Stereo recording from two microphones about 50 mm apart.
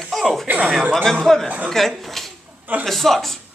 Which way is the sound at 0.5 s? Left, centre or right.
Right.